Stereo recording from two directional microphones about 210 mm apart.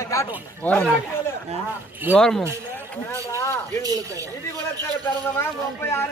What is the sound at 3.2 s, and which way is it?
Speech, 15° left (ahead or behind).